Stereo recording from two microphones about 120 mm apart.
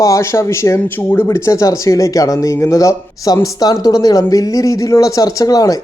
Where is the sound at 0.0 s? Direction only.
25° left (ahead or behind).